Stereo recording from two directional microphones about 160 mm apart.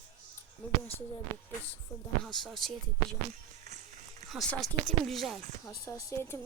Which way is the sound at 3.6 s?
45° right (ahead or behind).